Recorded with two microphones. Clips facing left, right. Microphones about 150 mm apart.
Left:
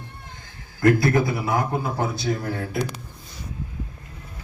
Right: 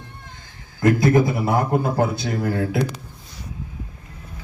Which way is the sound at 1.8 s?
60° right (ahead or behind).